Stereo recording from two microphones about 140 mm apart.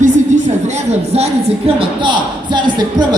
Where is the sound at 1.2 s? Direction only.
40° right (ahead or behind).